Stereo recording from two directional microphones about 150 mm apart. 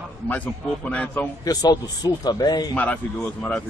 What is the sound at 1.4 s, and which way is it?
A man's voice, 25° left (ahead or behind).